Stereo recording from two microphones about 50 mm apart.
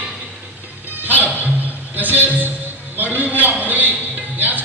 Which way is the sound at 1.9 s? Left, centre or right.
Right.